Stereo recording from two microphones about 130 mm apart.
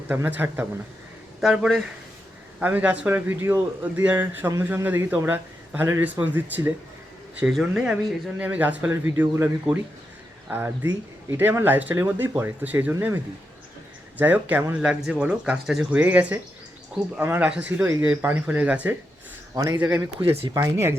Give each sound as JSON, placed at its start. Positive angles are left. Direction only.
{"t": 0.1, "sound": "speech", "side_deg": -10}
{"t": 1.4, "sound": "speech", "side_deg": 0}
{"t": 2.6, "sound": "speech", "side_deg": -10}
{"t": 19.5, "sound": "speech", "side_deg": -30}
{"t": 20.2, "sound": "speech", "side_deg": -20}